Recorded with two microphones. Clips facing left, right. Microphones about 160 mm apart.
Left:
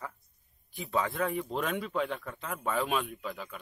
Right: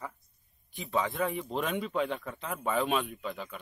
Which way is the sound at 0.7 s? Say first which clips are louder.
Even; centre (ahead or behind).